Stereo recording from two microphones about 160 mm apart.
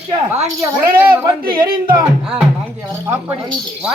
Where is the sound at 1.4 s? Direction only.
65° right (ahead or behind).